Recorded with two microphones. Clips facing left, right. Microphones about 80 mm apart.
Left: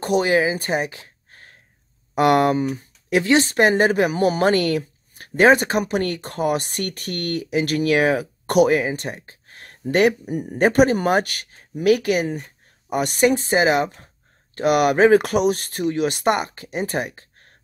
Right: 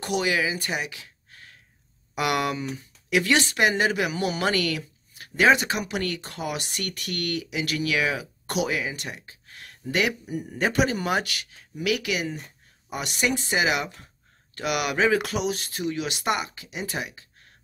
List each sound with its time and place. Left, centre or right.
0.0 s speech: left